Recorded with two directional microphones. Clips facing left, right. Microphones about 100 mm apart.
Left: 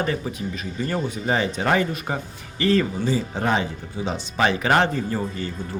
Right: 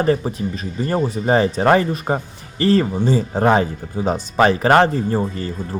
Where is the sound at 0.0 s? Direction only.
35° right (ahead or behind).